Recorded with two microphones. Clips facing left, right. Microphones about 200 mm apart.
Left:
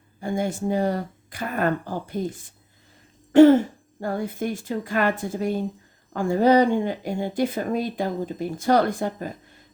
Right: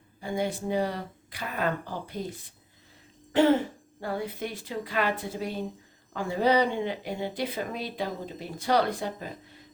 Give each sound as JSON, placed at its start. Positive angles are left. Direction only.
{"t": 0.2, "sound": "speech", "side_deg": 50}
{"t": 4.0, "sound": "speech", "side_deg": 45}